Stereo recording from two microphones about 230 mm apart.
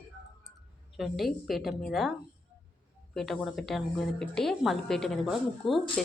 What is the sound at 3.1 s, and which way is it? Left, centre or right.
A woman's voice, centre.